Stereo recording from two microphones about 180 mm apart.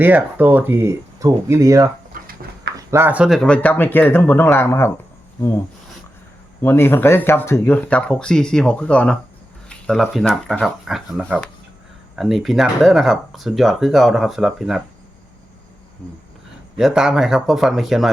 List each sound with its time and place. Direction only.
0.0 s speech: 10° right (ahead or behind)
2.1 s a sound: 50° right (ahead or behind)
2.7 s speech: 15° right (ahead or behind)
16.7 s speech: centre (ahead or behind)